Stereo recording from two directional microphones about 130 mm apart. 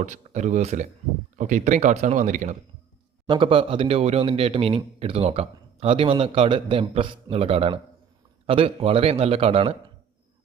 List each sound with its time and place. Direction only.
0.0 s speech: 65° right (ahead or behind)
1.4 s speech: 75° right (ahead or behind)
3.2 s a man's voice: 40° right (ahead or behind)